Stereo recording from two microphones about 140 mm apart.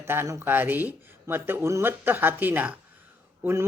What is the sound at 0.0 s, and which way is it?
Speech, 15° right (ahead or behind).